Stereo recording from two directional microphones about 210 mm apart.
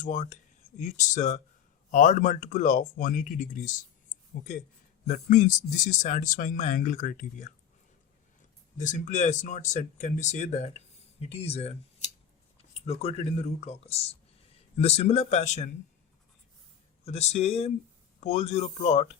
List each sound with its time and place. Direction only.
0.0 s speech: 35° left (ahead or behind)
5.0 s speech: 35° left (ahead or behind)
8.8 s speech: 35° left (ahead or behind)
17.1 s speech: 30° left (ahead or behind)